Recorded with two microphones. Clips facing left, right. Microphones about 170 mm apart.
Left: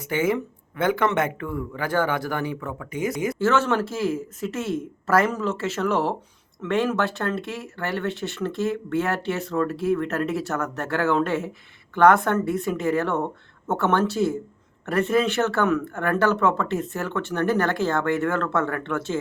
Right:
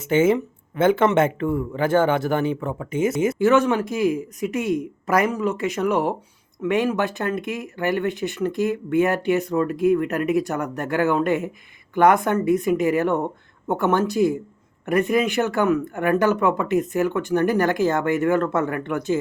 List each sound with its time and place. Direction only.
0.0 s speech: 25° right (ahead or behind)